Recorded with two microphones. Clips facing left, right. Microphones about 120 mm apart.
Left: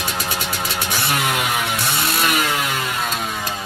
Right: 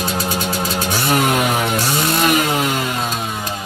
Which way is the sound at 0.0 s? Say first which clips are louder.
Right 5 dB; 35° right (ahead or behind).